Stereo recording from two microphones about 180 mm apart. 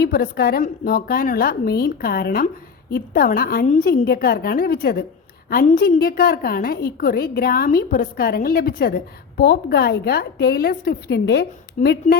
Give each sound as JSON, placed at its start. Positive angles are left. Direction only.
{"t": 0.0, "sound": "a woman's voice", "side_deg": 60}